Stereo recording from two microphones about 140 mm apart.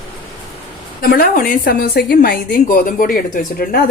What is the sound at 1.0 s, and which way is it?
A woman's voice, 90° left.